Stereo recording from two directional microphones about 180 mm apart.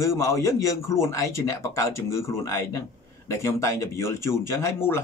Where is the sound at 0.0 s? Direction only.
15° left (ahead or behind).